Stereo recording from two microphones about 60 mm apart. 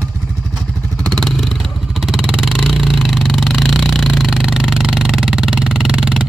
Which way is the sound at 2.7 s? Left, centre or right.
Centre.